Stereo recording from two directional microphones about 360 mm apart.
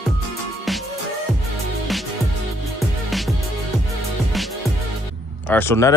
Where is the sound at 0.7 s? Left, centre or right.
Centre.